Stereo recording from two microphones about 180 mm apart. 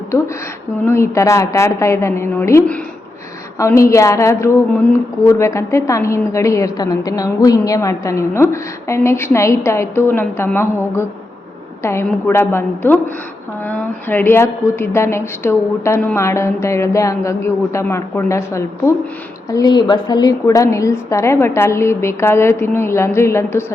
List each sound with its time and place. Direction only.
0.9 s a woman's voice: 15° left (ahead or behind)